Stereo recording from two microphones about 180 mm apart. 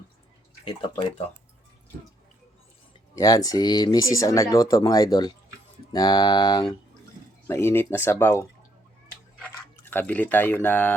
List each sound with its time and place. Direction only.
0.6 s speech: 30° left (ahead or behind)
3.2 s speech: 20° left (ahead or behind)
9.9 s speech: 10° left (ahead or behind)